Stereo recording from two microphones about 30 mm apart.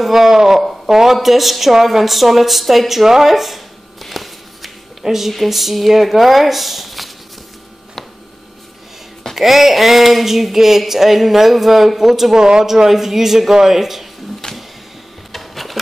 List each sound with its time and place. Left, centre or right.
0.0 s speech: centre
1.1 s a woman's voice: centre
3.1 s a sound: centre
5.0 s a woman's voice: centre
9.3 s a woman's voice: centre
12.4 s speech: right
14.4 s printer: left
15.3 s a sound: centre